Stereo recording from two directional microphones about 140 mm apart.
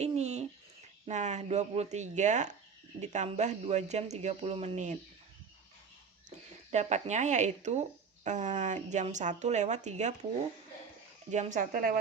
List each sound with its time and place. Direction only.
0.0 s owl: 50° right (ahead or behind)
1.0 s speech: 55° right (ahead or behind)
6.7 s speech: 55° right (ahead or behind)
11.3 s speech: 60° right (ahead or behind); by 11.9 s 80° right